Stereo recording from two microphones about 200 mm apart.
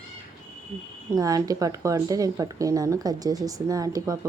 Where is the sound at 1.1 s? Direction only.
15° right (ahead or behind).